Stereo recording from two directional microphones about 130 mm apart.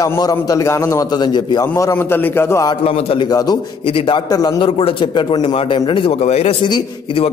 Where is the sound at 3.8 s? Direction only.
45° left (ahead or behind); by 4.6 s 30° left (ahead or behind).